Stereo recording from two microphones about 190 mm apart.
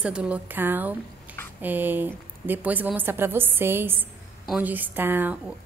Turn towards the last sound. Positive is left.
turn(degrees=-10)  # may be behind; listen again after turning